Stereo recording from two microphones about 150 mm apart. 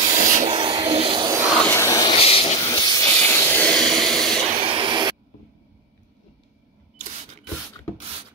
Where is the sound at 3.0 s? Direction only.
15° left (ahead or behind).